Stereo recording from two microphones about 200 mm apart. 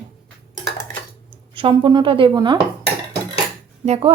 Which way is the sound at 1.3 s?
25° right (ahead or behind).